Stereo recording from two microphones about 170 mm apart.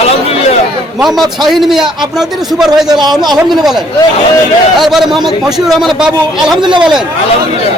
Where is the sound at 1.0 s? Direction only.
Centre (ahead or behind).